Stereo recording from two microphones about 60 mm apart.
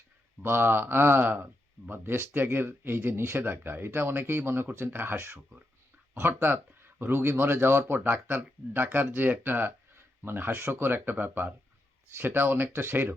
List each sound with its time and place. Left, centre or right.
0.4 s speech: right